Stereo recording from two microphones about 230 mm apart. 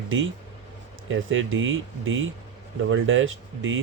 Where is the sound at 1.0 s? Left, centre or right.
Right.